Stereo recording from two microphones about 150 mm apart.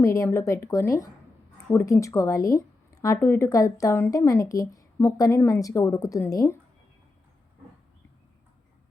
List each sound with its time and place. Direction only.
0.0 s a woman's voice: 20° left (ahead or behind)